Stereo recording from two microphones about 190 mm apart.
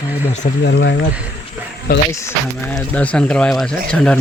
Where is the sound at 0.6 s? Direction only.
60° left (ahead or behind).